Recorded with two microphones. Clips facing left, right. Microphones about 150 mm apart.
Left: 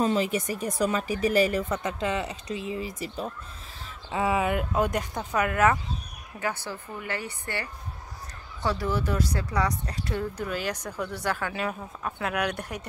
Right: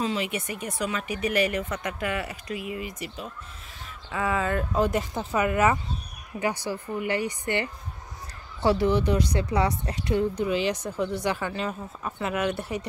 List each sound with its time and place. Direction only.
0.0 s speech: 40° left (ahead or behind)
4.1 s speech: 20° left (ahead or behind)
4.7 s speech: centre (ahead or behind); by 7.6 s 15° right (ahead or behind)
8.8 s speech: 5° left (ahead or behind)
9.1 s speech: 20° right (ahead or behind)
10.4 s speech: 10° right (ahead or behind)
11.5 s speech: centre (ahead or behind)